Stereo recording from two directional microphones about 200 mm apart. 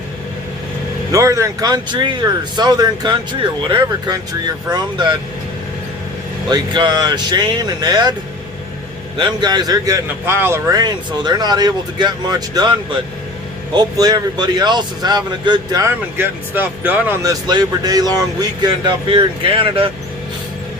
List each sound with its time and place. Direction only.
1.1 s speech: 15° right (ahead or behind)
6.5 s speech: 20° right (ahead or behind)
9.1 s speech: 20° right (ahead or behind)
13.7 s speech: 20° right (ahead or behind)